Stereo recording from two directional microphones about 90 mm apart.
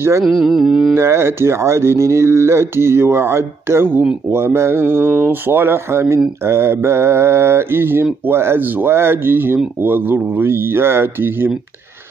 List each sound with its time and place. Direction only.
0.2 s mantra: centre (ahead or behind)
0.9 s speech: 30° right (ahead or behind)